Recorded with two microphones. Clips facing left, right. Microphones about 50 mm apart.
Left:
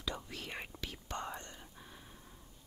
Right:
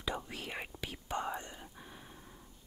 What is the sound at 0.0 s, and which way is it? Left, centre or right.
Whispering, right.